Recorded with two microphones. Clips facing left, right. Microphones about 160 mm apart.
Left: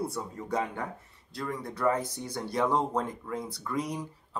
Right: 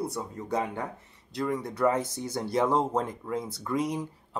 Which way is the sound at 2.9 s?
25° right (ahead or behind).